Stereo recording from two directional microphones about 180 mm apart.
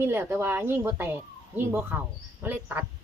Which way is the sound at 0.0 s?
15° right (ahead or behind).